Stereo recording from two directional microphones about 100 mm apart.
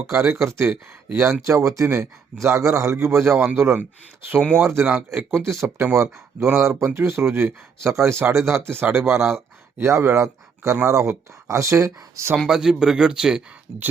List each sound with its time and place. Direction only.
0.1 s speech: 25° right (ahead or behind)
12.5 s speech: 5° right (ahead or behind)